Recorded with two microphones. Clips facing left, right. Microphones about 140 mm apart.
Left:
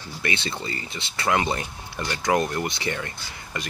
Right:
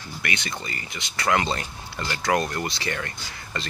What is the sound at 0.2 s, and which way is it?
Speech, 25° left (ahead or behind).